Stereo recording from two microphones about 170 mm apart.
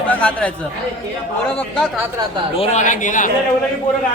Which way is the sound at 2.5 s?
40° left (ahead or behind).